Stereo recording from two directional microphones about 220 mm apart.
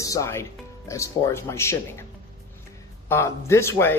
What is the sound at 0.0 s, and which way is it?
Speech, 15° left (ahead or behind).